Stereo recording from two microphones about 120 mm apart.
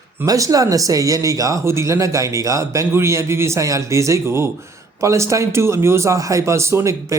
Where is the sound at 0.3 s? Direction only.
30° right (ahead or behind).